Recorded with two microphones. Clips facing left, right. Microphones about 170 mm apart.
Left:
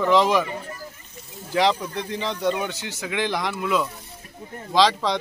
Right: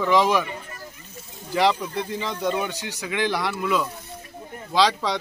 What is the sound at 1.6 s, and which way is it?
Speech, 10° right (ahead or behind).